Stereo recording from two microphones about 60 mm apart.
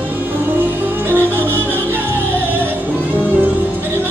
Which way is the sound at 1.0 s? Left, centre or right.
Right.